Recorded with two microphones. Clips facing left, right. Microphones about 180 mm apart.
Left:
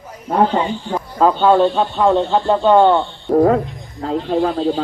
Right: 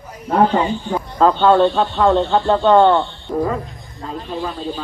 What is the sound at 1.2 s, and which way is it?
Speech, 10° left (ahead or behind).